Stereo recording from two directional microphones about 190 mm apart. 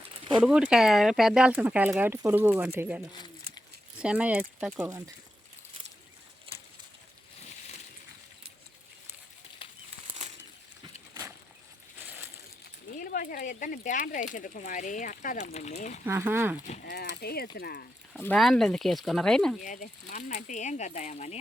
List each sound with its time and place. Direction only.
0.4 s speech: 5° right (ahead or behind)
4.9 s speech: 20° right (ahead or behind)
6.5 s a sound: 30° right (ahead or behind)
12.0 s a sound: 10° right (ahead or behind)
13.0 s speech: 50° left (ahead or behind)
16.0 s speech: 10° right (ahead or behind)
16.8 s speech: 55° left (ahead or behind)
18.2 s speech: 5° left (ahead or behind)
19.6 s speech: 45° left (ahead or behind)